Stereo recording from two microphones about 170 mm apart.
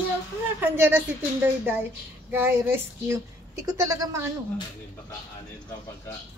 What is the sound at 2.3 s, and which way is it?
Speech, 15° right (ahead or behind).